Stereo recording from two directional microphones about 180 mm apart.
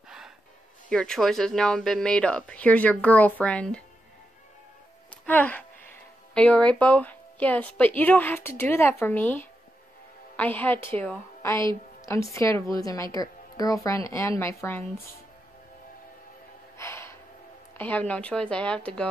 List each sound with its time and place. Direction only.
0.8 s speech: 5° left (ahead or behind)
5.2 s a woman's voice: 10° left (ahead or behind)
16.7 s gasp: 15° left (ahead or behind)
17.7 s a woman's voice: 10° left (ahead or behind)